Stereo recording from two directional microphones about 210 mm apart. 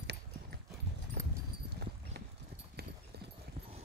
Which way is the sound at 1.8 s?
50° right (ahead or behind).